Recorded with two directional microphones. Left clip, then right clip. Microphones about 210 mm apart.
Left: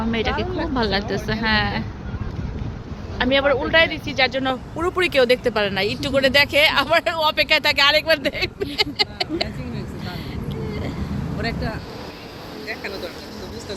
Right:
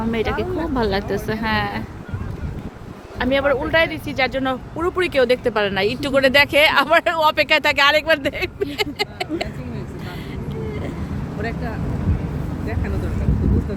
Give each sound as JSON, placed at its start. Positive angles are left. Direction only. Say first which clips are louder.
{"t": 0.7, "sound": "speech", "louder": "even", "side_deg": -15}
{"t": 3.2, "sound": "speech", "louder": "even", "side_deg": -10}
{"t": 8.2, "sound": "speech", "louder": "right 1 dB", "side_deg": -10}